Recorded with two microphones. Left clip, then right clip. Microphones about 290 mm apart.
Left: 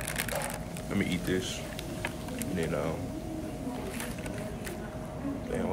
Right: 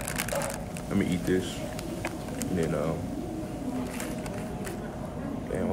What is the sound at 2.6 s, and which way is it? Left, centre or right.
Speech, centre.